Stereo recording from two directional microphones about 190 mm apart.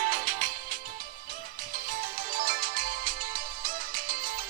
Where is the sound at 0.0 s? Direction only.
45° right (ahead or behind).